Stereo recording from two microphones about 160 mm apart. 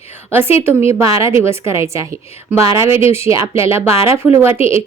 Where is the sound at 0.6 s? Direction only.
15° right (ahead or behind).